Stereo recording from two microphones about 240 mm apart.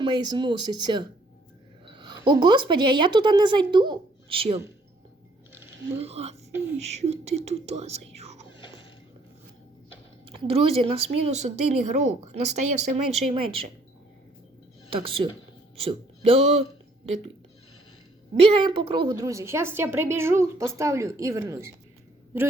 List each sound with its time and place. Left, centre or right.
0.0 s a woman's voice: centre
6.0 s speech: right
8.4 s a sound: centre
10.3 s speech: right
14.8 s speech: right
18.5 s a woman's voice: right